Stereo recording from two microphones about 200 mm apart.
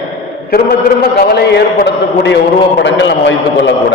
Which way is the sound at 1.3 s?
55° left (ahead or behind).